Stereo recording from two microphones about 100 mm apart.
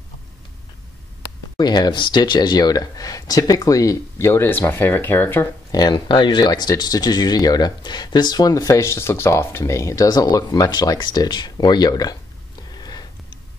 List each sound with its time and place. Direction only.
1.6 s speech: 45° left (ahead or behind); by 5.5 s 20° left (ahead or behind)
5.7 s speech: 40° left (ahead or behind)
12.7 s sniff: 40° left (ahead or behind)